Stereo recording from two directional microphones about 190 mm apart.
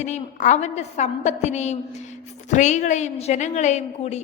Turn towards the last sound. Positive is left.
turn(degrees=35)  # may be behind; listen again after turning